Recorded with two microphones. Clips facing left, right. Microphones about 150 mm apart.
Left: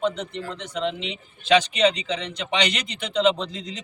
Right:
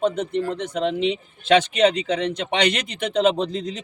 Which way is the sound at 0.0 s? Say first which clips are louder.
Right 5 dB; 50° right (ahead or behind).